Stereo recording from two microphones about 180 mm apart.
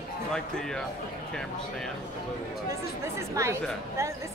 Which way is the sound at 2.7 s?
15° right (ahead or behind).